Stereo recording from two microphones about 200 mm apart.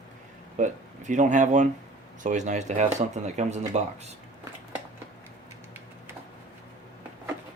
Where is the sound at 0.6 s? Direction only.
40° right (ahead or behind).